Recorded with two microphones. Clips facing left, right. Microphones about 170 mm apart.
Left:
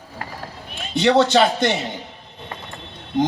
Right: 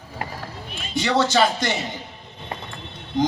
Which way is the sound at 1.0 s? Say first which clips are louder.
Left 4 dB; 60° left (ahead or behind).